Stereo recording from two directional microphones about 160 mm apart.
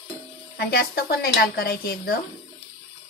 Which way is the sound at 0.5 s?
80° left.